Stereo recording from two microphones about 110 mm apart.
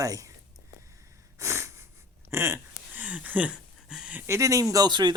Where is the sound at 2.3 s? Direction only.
25° right (ahead or behind); by 4.2 s 10° right (ahead or behind).